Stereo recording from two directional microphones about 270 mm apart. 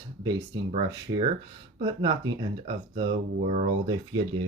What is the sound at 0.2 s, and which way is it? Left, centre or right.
Speech, centre.